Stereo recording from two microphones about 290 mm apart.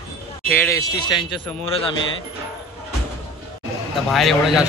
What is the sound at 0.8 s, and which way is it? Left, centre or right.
Speech, centre.